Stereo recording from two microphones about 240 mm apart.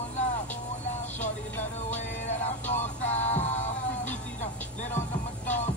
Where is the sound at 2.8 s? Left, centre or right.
Left.